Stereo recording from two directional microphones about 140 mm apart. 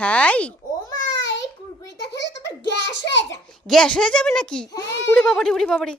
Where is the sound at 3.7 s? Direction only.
5° left (ahead or behind).